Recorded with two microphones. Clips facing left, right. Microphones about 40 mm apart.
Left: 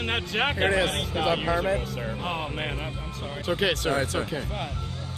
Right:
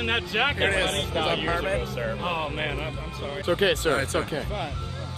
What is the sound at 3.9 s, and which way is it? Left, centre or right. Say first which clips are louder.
Speech: right 1 dB; right.